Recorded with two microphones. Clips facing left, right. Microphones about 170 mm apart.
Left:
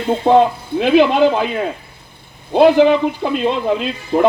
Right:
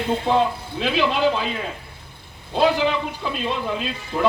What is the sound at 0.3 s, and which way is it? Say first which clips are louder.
A man's voice: left 11 dB; 55° left (ahead or behind).